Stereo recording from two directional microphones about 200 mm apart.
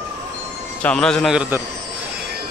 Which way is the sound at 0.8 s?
5° left (ahead or behind).